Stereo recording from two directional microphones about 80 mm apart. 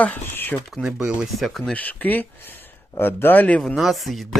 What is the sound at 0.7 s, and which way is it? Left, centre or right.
Speech, centre.